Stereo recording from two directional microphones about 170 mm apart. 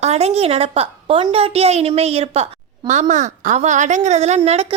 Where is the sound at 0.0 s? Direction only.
40° right (ahead or behind).